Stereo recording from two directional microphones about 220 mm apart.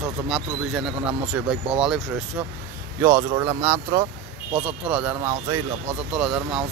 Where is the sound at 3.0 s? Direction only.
15° right (ahead or behind).